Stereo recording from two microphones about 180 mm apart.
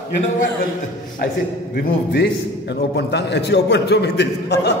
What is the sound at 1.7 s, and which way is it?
A man's voice, 65° left (ahead or behind).